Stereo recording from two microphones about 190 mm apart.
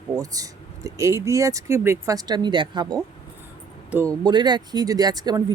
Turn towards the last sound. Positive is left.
turn(degrees=-20)  # may be behind; listen again after turning